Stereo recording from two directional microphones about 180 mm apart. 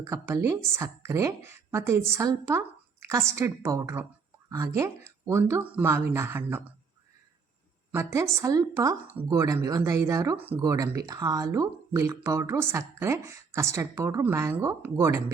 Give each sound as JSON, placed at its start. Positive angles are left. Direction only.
{"t": 0.0, "sound": "speech", "side_deg": -15}
{"t": 7.9, "sound": "speech", "side_deg": -15}